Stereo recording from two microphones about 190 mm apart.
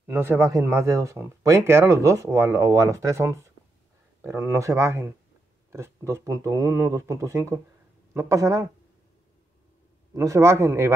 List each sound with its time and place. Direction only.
0.0 s speech: 10° right (ahead or behind)
10.1 s speech: 15° right (ahead or behind)